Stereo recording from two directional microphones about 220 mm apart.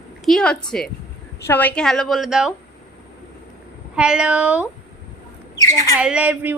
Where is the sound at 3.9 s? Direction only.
5° right (ahead or behind).